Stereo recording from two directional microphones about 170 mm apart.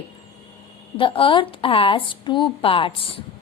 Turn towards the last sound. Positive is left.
turn(degrees=30)  # may be behind; listen again after turning